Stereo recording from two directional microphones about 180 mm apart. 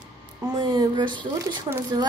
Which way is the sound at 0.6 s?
25° right (ahead or behind).